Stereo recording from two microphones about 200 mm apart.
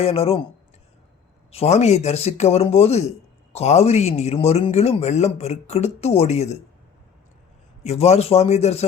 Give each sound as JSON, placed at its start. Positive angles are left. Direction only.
{"t": 0.0, "sound": "speech", "side_deg": 30}
{"t": 1.5, "sound": "a man's voice", "side_deg": 35}
{"t": 7.9, "sound": "a man's voice", "side_deg": 35}